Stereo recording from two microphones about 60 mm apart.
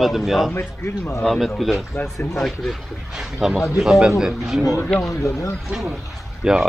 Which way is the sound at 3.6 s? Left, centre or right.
Centre.